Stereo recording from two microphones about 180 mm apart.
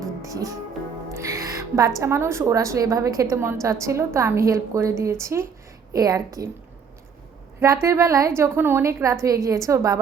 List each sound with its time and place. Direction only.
0.0 s music: 20° right (ahead or behind)
2.0 s a woman's voice: 15° right (ahead or behind)
7.6 s a woman's voice: 15° right (ahead or behind)